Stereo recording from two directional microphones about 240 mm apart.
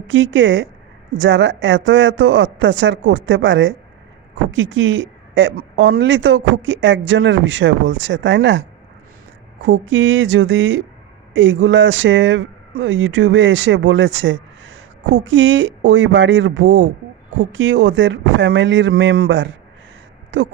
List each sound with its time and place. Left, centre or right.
0.1 s speech: right
9.9 s speech: right